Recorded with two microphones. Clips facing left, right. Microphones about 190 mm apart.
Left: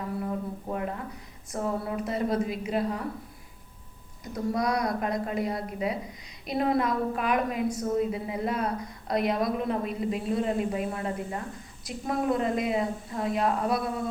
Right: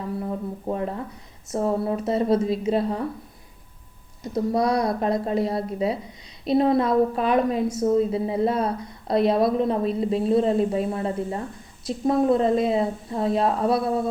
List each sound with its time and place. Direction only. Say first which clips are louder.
0.7 s a woman's voice: right 6 dB; 30° right (ahead or behind)
4.2 s a woman's voice: right 6 dB; 25° right (ahead or behind)